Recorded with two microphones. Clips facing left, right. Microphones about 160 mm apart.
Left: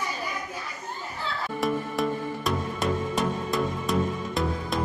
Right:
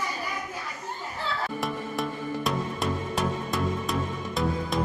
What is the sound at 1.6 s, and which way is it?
Music, centre (ahead or behind).